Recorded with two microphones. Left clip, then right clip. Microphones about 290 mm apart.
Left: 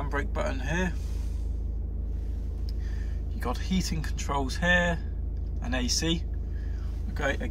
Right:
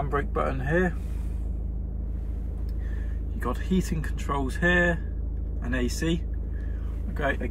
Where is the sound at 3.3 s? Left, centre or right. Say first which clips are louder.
Right 3 dB; centre.